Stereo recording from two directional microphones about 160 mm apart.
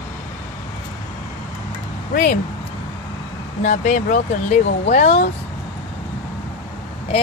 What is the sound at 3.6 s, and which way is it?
Speech, 50° left (ahead or behind).